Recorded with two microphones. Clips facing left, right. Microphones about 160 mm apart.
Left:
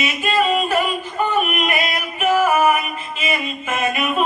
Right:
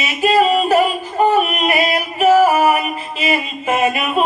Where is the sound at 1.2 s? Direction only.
35° right (ahead or behind).